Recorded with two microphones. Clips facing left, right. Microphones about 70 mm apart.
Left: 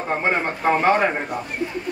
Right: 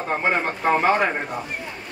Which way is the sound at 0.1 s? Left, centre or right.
Centre.